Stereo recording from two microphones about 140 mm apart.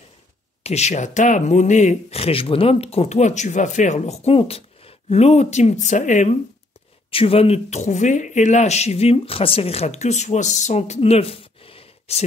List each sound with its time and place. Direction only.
0.7 s speech: 50° left (ahead or behind)
7.1 s speech: 40° left (ahead or behind)